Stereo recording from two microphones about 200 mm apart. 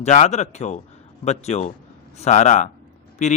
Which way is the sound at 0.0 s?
35° left (ahead or behind).